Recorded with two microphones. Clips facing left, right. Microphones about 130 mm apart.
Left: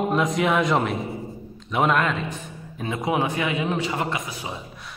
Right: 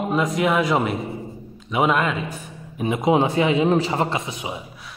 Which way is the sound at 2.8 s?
20° right (ahead or behind).